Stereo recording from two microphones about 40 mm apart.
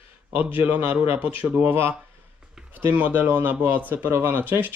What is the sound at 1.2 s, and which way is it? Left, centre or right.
Speech, right.